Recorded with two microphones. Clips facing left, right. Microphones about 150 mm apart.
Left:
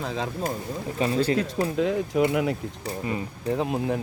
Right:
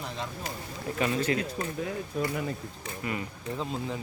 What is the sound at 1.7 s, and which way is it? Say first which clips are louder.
Speech: left 12 dB; 90° left.